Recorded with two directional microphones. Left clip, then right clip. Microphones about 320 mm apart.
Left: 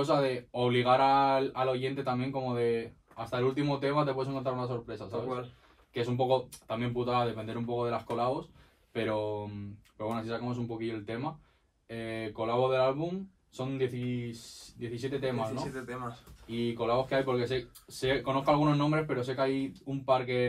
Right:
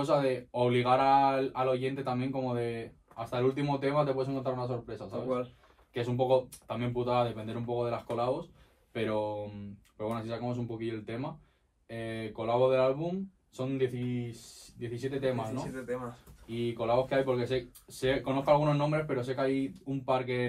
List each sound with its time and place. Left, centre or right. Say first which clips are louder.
0.0 s speech: even; centre
5.9 s speech: right 1 dB; centre